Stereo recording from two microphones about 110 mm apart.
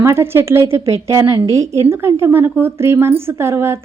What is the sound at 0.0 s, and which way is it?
A woman's voice, 25° right (ahead or behind).